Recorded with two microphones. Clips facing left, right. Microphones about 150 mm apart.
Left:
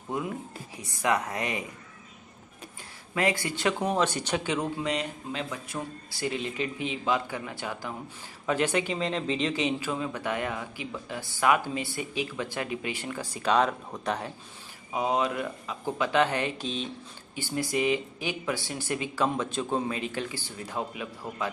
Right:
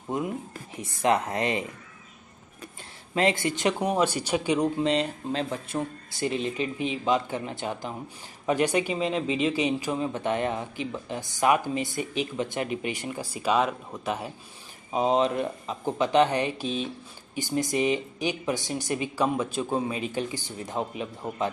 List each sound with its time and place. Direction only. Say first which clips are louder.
0.7 s speech: right 3 dB; 25° right (ahead or behind)
3.2 s speech: right 3 dB; 25° right (ahead or behind)
4.8 s speech: right 5 dB; 35° right (ahead or behind)
6.1 s speech: right 3 dB; 25° right (ahead or behind); by 14.3 s 5° right (ahead or behind)
14.9 s speech: right 4 dB; 25° right (ahead or behind)